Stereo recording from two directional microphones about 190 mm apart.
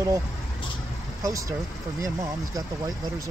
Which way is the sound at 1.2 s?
15° right (ahead or behind).